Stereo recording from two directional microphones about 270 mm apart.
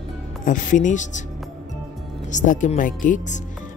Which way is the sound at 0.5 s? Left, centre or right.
Left.